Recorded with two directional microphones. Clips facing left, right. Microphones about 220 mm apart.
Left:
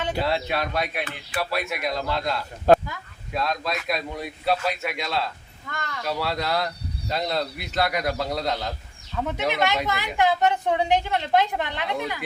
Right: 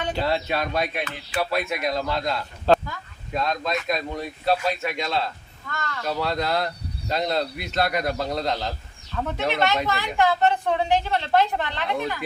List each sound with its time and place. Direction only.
0.1 s speech: 5° left (ahead or behind)
2.7 s a sound: 15° left (ahead or behind)
3.3 s a woman's voice: centre (ahead or behind)